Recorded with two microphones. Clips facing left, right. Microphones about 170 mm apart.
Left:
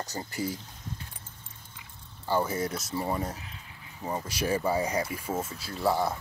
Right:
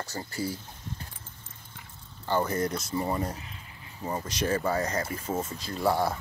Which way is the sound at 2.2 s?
5° left (ahead or behind).